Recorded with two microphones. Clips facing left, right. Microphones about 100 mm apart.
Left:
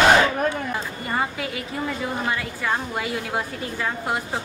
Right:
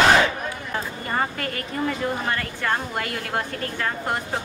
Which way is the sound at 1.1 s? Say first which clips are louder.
Even; 5° left (ahead or behind).